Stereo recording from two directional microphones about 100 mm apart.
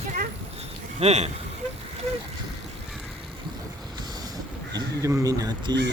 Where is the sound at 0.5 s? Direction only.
90° right.